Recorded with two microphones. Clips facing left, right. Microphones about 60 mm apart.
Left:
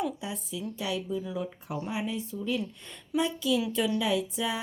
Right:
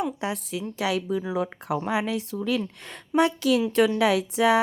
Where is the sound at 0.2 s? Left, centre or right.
Right.